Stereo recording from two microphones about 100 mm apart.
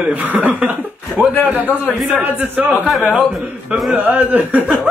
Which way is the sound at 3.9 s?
15° right (ahead or behind).